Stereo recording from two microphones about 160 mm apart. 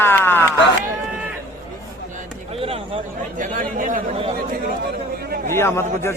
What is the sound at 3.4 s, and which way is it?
Chatter, 55° right (ahead or behind).